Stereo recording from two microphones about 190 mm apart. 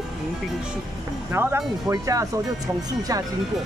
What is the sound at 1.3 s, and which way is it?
Speech, 10° right (ahead or behind).